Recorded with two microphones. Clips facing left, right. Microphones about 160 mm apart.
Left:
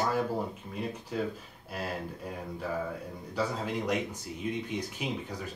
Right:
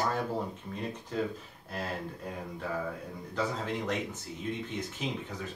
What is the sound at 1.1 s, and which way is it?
Speech, 10° left (ahead or behind).